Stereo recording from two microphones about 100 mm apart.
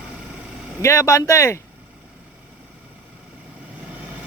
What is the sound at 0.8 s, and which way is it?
Speech, 30° left (ahead or behind).